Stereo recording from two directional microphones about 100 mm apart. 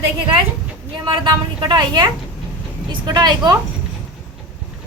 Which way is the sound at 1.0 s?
50° right (ahead or behind).